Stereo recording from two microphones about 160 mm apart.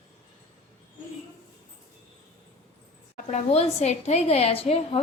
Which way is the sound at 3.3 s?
45° left (ahead or behind).